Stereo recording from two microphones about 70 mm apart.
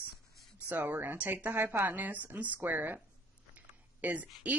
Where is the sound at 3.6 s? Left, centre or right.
Right.